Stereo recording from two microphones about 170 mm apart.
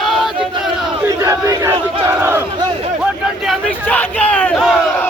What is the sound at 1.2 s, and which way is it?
Battle cry, 15° right (ahead or behind).